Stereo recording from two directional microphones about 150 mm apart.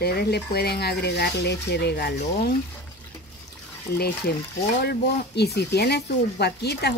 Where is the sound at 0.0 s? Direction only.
90° left.